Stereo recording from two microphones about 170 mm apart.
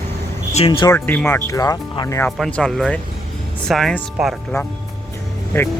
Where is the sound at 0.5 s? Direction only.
35° left (ahead or behind).